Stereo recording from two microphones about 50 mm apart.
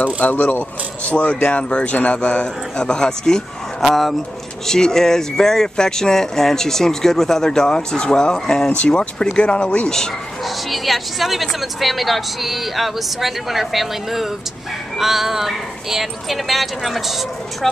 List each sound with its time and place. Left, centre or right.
0.0 s a woman's voice: left; by 10.0 s centre
10.4 s a woman's voice: centre